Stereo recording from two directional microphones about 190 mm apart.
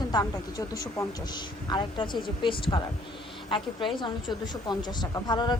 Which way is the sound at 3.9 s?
25° left (ahead or behind).